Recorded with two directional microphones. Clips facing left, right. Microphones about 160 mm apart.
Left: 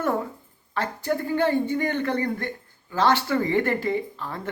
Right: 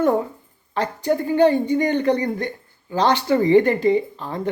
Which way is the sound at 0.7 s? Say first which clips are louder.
Right 5 dB; 20° right (ahead or behind).